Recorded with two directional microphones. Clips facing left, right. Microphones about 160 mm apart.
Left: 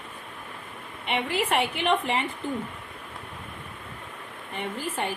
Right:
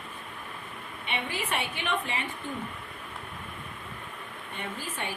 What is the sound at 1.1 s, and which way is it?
A woman's voice, 90° left.